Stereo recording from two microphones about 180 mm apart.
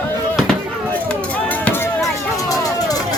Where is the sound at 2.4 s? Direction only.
20° left (ahead or behind).